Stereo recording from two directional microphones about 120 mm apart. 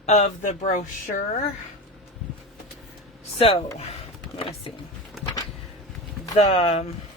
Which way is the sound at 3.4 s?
55° left (ahead or behind).